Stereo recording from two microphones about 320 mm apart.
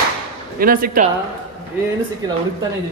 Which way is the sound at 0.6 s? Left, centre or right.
Right.